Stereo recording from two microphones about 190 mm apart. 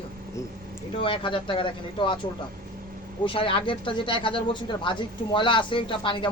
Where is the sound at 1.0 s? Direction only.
25° left (ahead or behind).